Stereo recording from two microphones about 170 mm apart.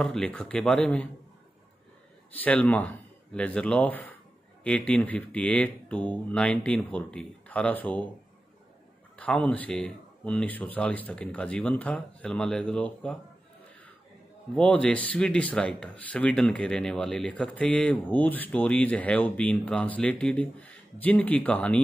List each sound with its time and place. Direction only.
0.0 s speech: 5° left (ahead or behind)
2.4 s speech: 10° left (ahead or behind)
9.1 s speech: 5° left (ahead or behind)
14.5 s speech: 5° left (ahead or behind)